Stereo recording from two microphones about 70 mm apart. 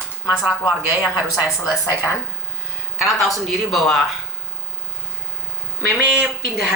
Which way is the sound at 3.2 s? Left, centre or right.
Centre.